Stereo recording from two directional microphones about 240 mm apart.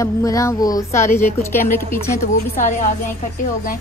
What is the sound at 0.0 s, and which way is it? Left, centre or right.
A woman's voice, centre.